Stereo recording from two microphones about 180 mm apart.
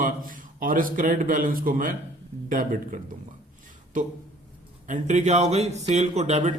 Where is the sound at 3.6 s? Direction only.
45° right (ahead or behind).